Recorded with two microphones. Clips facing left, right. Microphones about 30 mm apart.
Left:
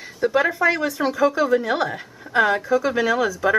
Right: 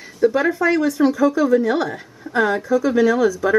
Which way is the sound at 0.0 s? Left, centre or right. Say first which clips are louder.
Right 3 dB; centre.